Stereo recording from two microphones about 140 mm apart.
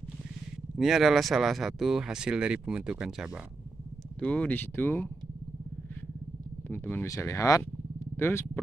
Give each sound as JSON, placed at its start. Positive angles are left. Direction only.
{"t": 0.7, "sound": "speech", "side_deg": 0}
{"t": 4.2, "sound": "speech", "side_deg": 10}
{"t": 6.7, "sound": "vehicle", "side_deg": 15}